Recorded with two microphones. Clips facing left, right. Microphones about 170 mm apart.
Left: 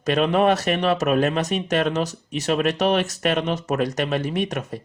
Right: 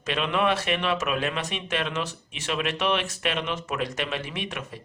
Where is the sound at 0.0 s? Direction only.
40° left (ahead or behind).